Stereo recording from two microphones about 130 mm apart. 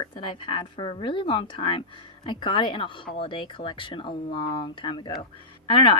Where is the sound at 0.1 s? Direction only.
40° left (ahead or behind).